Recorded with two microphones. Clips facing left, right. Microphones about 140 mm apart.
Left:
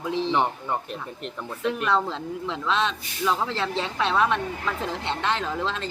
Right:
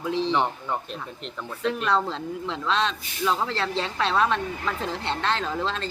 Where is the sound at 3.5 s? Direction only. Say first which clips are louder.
Even; 15° left (ahead or behind).